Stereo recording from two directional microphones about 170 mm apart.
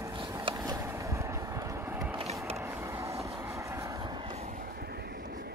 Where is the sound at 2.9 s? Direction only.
15° right (ahead or behind).